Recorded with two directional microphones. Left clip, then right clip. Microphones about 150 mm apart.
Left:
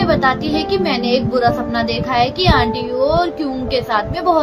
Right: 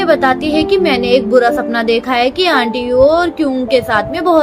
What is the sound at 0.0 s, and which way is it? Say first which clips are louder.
Speech: right 4 dB; 65° right (ahead or behind).